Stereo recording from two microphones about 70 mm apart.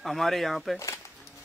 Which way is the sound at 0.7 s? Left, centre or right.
Left.